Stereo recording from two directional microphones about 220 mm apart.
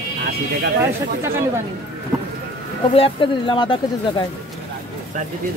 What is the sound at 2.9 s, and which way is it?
Speech, 25° left (ahead or behind).